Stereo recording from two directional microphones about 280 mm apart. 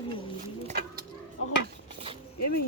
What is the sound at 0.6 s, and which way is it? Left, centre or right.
Bird, right.